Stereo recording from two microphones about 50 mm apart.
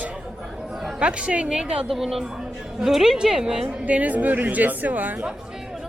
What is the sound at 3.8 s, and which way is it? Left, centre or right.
Speech, right.